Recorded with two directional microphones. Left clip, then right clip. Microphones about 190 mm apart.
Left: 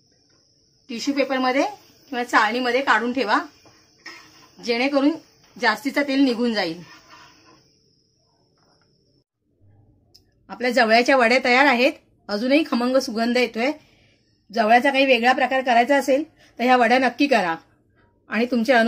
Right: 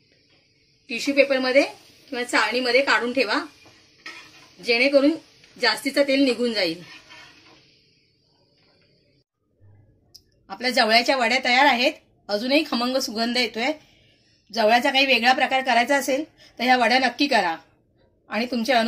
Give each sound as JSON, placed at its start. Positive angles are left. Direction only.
{"t": 1.0, "sound": "a woman's voice", "side_deg": 35}
{"t": 4.6, "sound": "a woman's voice", "side_deg": 40}
{"t": 10.1, "sound": "a woman's voice", "side_deg": 45}
{"t": 14.5, "sound": "a woman's voice", "side_deg": 40}